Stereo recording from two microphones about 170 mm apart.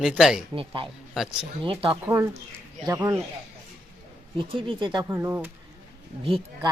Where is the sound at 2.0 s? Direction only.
15° right (ahead or behind).